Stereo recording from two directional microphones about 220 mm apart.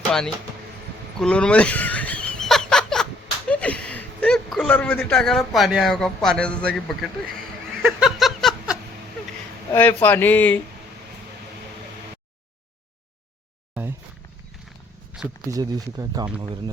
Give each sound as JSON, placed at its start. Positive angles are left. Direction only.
{"t": 1.2, "sound": "snicker", "side_deg": 5}
{"t": 3.5, "sound": "speech", "side_deg": 5}
{"t": 7.8, "sound": "a sound", "side_deg": 0}
{"t": 9.7, "sound": "speech", "side_deg": 10}
{"t": 15.4, "sound": "speech", "side_deg": -15}